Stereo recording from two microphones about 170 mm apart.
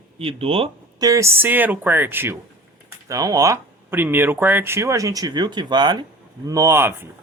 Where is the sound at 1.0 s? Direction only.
20° right (ahead or behind).